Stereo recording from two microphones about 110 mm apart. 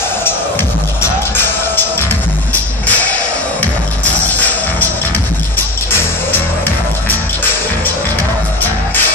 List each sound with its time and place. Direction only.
1.3 s music: 20° left (ahead or behind)
5.9 s music: 20° left (ahead or behind)